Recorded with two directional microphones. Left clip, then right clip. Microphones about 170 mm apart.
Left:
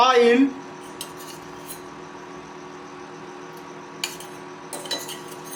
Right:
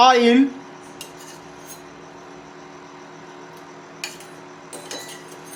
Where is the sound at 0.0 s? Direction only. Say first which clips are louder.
Right 2 dB; 50° right (ahead or behind).